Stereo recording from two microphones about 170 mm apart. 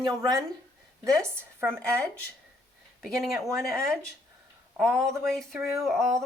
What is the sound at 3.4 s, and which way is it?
Speech, 20° right (ahead or behind).